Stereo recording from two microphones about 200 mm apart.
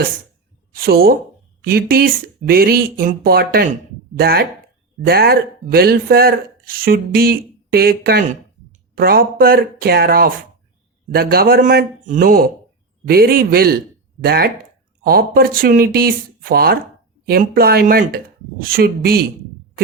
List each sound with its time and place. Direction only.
0.7 s a man's voice: 50° right (ahead or behind)